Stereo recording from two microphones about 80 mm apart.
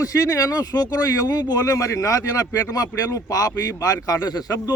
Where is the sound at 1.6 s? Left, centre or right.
Left.